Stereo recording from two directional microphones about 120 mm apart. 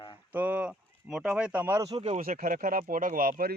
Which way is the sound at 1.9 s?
60° right (ahead or behind).